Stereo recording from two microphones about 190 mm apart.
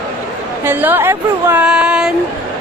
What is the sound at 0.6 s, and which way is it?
A woman's voice, 10° right (ahead or behind).